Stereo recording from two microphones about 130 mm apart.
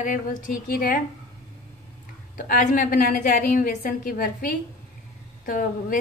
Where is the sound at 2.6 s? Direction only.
80° left.